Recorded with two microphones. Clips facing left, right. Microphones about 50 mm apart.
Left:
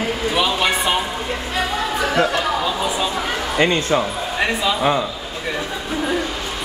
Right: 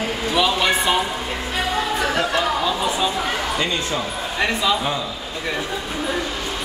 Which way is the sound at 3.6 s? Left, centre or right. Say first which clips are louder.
Left 6 dB; left.